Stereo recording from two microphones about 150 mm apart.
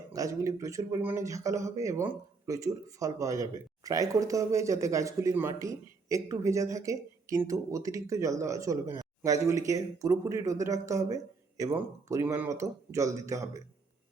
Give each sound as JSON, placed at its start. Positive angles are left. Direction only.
{"t": 0.1, "sound": "speech", "side_deg": -20}